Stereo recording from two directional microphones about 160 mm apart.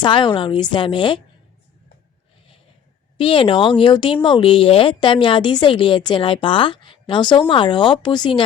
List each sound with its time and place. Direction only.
0.0 s a woman's voice: 30° left (ahead or behind)
3.2 s speech: 30° left (ahead or behind)